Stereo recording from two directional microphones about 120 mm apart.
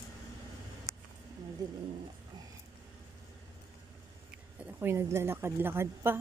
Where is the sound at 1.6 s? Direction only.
30° right (ahead or behind).